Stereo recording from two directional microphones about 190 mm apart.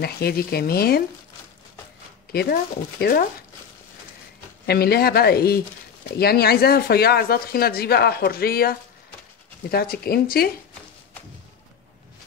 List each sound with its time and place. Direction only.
0.0 s speech: 55° left (ahead or behind)
2.3 s speech: 55° left (ahead or behind)
4.6 s speech: 55° left (ahead or behind)